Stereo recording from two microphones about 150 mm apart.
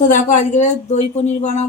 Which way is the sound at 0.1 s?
55° left (ahead or behind).